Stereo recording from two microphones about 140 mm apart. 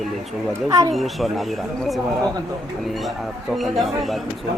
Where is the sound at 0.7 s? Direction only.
25° right (ahead or behind).